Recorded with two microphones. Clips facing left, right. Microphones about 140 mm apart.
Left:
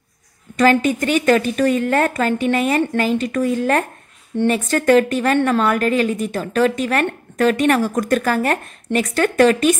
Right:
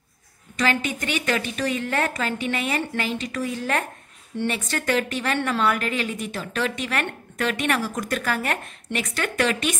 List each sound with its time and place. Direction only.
0.6 s a woman's voice: 45° left (ahead or behind)